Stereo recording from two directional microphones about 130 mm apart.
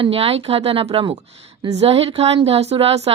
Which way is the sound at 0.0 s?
45° right (ahead or behind).